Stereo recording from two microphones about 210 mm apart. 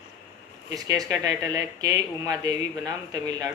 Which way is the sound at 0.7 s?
15° right (ahead or behind).